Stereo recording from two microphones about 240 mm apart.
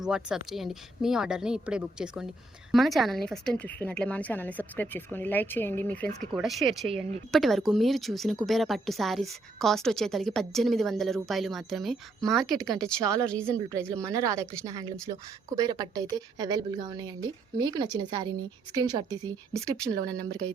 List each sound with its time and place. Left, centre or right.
0.0 s a woman's voice: centre
13.0 s a woman's voice: centre
13.2 s a woman's voice: centre
14.0 s a woman's voice: centre